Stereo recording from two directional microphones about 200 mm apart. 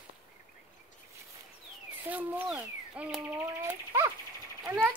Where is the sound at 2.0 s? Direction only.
10° right (ahead or behind).